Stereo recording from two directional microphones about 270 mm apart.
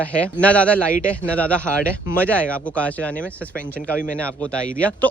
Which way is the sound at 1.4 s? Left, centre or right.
Centre.